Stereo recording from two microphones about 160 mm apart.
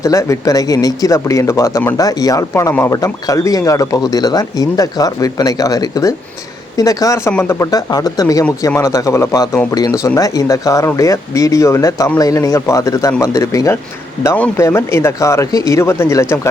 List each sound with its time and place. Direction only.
0.0 s speech: 20° left (ahead or behind)